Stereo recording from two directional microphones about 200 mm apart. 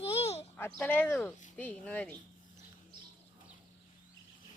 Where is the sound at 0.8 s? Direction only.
10° left (ahead or behind).